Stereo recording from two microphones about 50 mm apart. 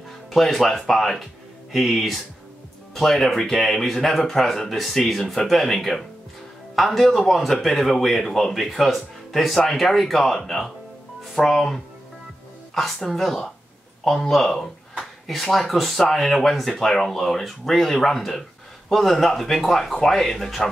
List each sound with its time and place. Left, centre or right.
0.3 s speech: centre